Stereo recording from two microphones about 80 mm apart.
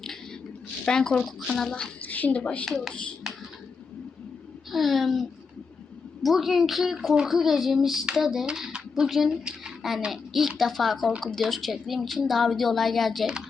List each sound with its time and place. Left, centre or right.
0.9 s a woman's voice: centre
1.7 s a child's voice: centre
2.6 s a woman's voice: centre
3.3 s a sound: centre
4.7 s a woman's voice: centre
6.2 s a woman's voice: centre